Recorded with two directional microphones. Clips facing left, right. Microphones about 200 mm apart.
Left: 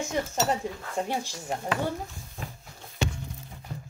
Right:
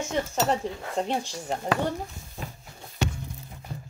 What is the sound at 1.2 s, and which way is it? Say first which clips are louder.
Speech: right 2 dB; 10° left (ahead or behind).